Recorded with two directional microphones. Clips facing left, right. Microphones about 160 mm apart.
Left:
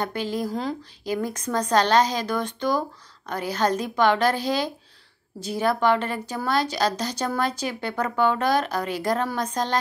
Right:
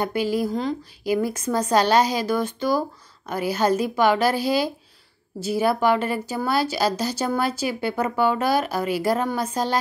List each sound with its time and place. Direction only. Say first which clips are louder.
0.0 s a woman's voice: right 4 dB; 10° right (ahead or behind)